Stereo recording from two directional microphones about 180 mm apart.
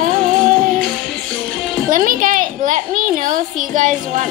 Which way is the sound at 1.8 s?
50° right (ahead or behind).